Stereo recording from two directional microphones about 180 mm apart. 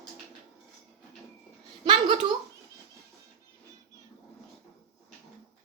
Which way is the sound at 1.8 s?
25° right (ahead or behind).